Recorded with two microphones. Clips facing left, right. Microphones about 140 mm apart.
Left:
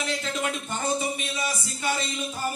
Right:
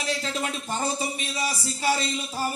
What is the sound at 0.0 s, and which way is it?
Speech, 35° right (ahead or behind).